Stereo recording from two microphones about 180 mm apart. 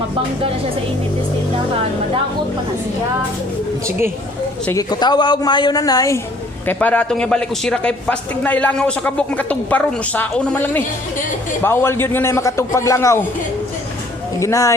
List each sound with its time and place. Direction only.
4.6 s a woman's voice: 20° left (ahead or behind)
6.7 s a man's voice: 10° left (ahead or behind)
14.3 s a man's voice: 15° left (ahead or behind)